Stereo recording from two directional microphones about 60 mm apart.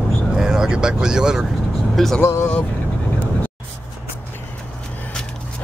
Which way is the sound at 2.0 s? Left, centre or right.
Centre.